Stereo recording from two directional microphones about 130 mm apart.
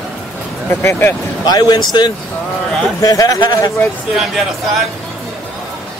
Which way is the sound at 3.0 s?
25° left (ahead or behind).